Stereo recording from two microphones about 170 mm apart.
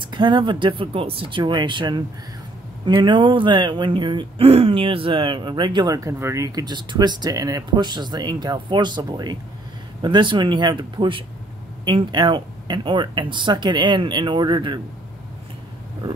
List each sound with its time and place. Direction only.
0.0 s speech: 30° right (ahead or behind)